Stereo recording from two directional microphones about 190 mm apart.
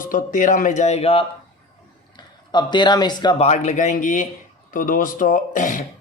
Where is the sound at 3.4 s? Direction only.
35° left (ahead or behind).